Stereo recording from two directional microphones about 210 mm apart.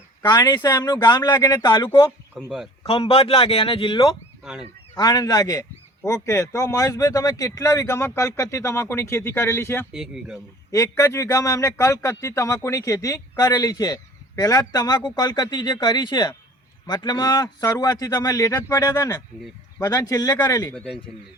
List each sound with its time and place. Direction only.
0.2 s speech: 20° left (ahead or behind)
2.3 s speech: centre (ahead or behind)
2.8 s speech: 25° left (ahead or behind)
9.9 s speech: 5° right (ahead or behind)
10.7 s speech: 15° left (ahead or behind)